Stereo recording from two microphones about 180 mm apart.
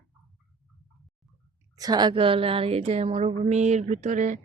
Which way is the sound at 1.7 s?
20° right (ahead or behind).